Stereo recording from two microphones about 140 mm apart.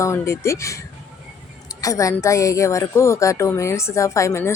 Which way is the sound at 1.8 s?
25° left (ahead or behind).